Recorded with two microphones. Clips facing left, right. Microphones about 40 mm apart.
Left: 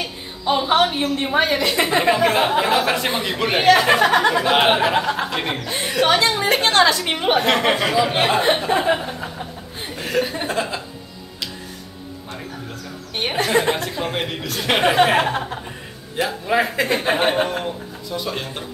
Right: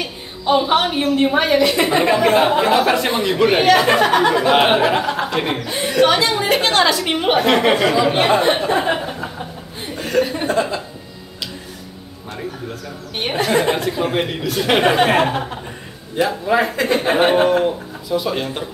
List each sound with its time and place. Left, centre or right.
0.0 s a woman's voice: centre
6.5 s a woman's voice: left
7.2 s speech: centre
8.9 s chuckle: centre
13.5 s speech: centre